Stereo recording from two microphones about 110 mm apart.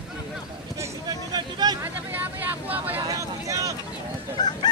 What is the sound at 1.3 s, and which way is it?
Speech, 40° right (ahead or behind).